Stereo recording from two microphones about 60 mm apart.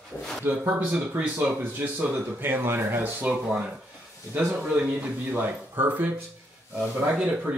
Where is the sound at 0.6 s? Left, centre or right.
Right.